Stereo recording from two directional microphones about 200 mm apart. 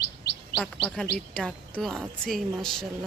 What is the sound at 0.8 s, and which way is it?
Speech, 5° right (ahead or behind).